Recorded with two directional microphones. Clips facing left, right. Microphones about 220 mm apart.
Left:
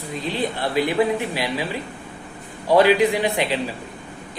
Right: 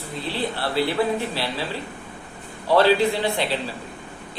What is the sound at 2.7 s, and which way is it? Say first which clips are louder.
Speech: left 2 dB; 15° left (ahead or behind).